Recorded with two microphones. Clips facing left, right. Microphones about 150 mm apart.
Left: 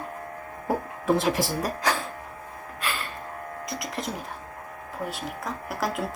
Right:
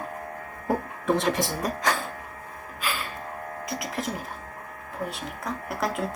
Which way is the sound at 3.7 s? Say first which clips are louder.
Right 2 dB; centre (ahead or behind).